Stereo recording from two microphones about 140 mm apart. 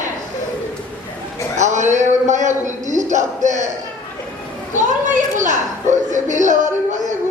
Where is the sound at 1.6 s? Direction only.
60° right (ahead or behind).